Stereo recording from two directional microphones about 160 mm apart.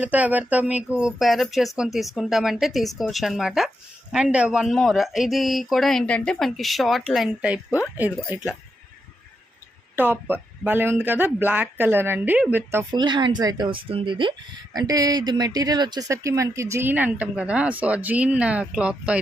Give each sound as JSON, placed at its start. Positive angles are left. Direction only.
{"t": 0.0, "sound": "speech", "side_deg": -10}
{"t": 9.9, "sound": "speech", "side_deg": -10}
{"t": 12.9, "sound": "speech", "side_deg": -30}